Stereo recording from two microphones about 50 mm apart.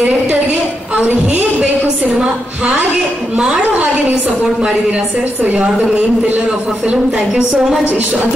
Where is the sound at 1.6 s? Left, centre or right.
Right.